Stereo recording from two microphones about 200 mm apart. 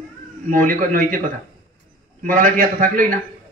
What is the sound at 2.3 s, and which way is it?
Speech, 40° right (ahead or behind).